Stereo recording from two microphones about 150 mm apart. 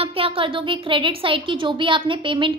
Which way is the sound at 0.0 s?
40° right (ahead or behind).